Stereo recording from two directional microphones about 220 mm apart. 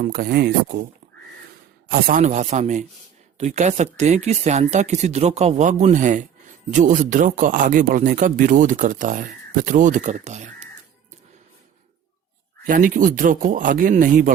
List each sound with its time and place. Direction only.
0.0 s speech: 40° right (ahead or behind)
1.9 s speech: 35° right (ahead or behind)
12.6 s speech: 40° right (ahead or behind)